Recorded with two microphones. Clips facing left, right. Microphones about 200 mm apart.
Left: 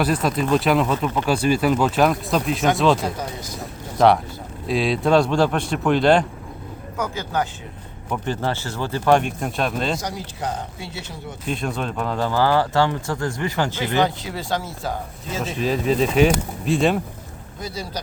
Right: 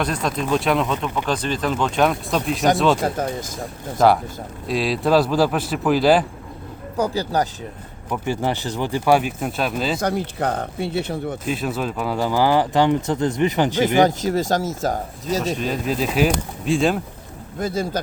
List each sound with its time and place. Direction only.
0.0 s speech: 5° left (ahead or behind)
3.2 s speech: 50° right (ahead or behind)
3.9 s speech: centre (ahead or behind)
6.9 s speech: 35° right (ahead or behind)
8.1 s speech: 10° right (ahead or behind)
10.0 s speech: 60° right (ahead or behind)
11.4 s speech: 5° right (ahead or behind)
14.0 s speech: 45° right (ahead or behind)
15.5 s speech: centre (ahead or behind)
17.6 s speech: 50° right (ahead or behind)